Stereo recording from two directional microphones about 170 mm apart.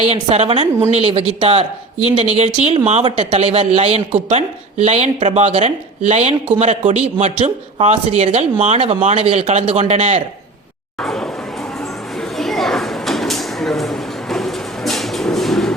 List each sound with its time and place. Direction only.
0.1 s a man's voice: 40° right (ahead or behind)
11.0 s speech: 5° left (ahead or behind)
12.4 s a sound: centre (ahead or behind)